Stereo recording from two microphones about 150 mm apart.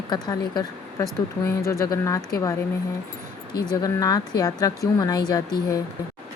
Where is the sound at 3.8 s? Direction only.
25° left (ahead or behind).